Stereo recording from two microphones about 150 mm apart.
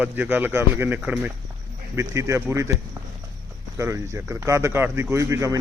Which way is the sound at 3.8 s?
20° right (ahead or behind).